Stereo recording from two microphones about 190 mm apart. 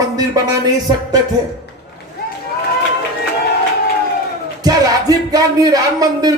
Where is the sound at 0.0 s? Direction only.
20° right (ahead or behind).